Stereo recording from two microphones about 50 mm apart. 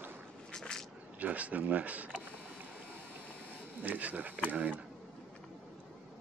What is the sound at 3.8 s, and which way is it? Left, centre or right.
Speech, right.